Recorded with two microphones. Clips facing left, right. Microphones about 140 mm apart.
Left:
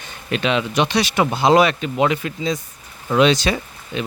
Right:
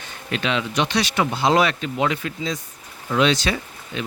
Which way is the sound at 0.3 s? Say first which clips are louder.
Left 4 dB; 20° left (ahead or behind).